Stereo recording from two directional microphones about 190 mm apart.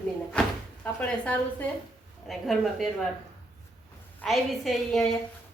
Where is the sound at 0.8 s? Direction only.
5° left (ahead or behind).